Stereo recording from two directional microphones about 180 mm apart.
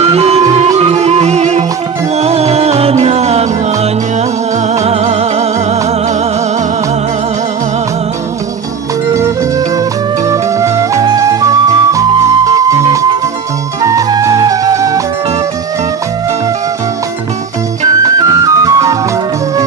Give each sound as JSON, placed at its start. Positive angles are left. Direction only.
{"t": 0.1, "sound": "music", "side_deg": -35}
{"t": 4.7, "sound": "music", "side_deg": -35}
{"t": 10.2, "sound": "music", "side_deg": -15}
{"t": 18.2, "sound": "music", "side_deg": -20}